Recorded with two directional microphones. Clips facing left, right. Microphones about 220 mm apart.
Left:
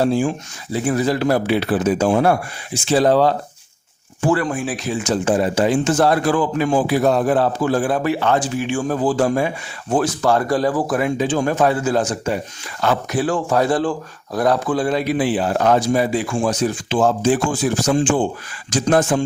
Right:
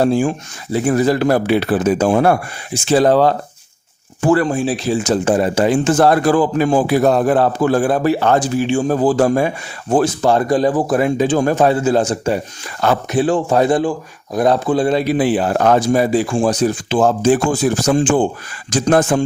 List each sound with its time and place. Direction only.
0.0 s speech: 50° right (ahead or behind)
4.4 s speech: 25° right (ahead or behind); by 6.3 s 55° right (ahead or behind)
6.3 s speech: 35° right (ahead or behind)
8.6 s speech: 25° right (ahead or behind)
8.9 s speech: 40° right (ahead or behind)
10.0 s speech: 25° right (ahead or behind)
10.9 s speech: 40° right (ahead or behind)
15.2 s speech: 50° right (ahead or behind)